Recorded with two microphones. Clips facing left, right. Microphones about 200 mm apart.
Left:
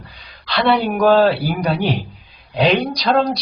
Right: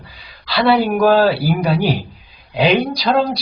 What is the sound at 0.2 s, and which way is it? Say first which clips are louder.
A man's voice: right 2 dB; 5° right (ahead or behind).